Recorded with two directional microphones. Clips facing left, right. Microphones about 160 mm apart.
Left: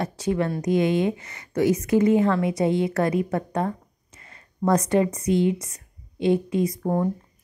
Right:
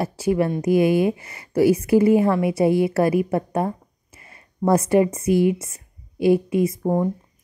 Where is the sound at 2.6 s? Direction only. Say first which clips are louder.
Right 5 dB; 25° left (ahead or behind).